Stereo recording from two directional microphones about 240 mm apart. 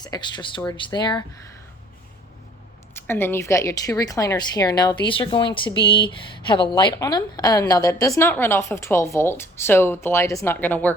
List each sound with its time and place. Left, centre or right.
0.0 s a woman's voice: centre
2.9 s a woman's voice: centre